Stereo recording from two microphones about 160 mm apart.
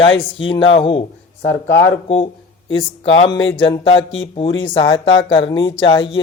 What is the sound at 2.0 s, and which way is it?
Speech, 40° left (ahead or behind).